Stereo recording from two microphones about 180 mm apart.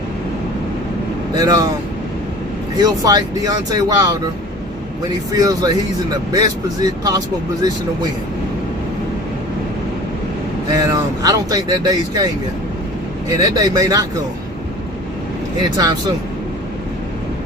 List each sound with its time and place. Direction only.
1.4 s speech: 20° right (ahead or behind)
2.7 s speech: 20° right (ahead or behind)
5.4 s speech: 20° right (ahead or behind)
10.7 s speech: 20° right (ahead or behind)
13.4 s speech: 20° right (ahead or behind)
15.8 s speech: 20° right (ahead or behind)